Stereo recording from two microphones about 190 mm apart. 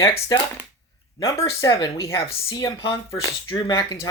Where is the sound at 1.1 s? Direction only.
15° left (ahead or behind).